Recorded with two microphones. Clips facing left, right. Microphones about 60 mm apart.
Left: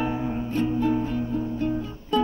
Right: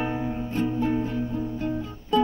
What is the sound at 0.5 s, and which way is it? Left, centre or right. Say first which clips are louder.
Music: left 2 dB; centre.